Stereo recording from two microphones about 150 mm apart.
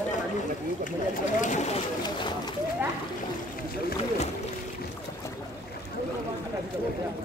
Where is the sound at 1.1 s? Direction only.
55° left (ahead or behind).